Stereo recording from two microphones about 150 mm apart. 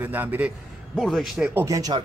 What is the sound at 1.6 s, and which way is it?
Speech, 25° right (ahead or behind).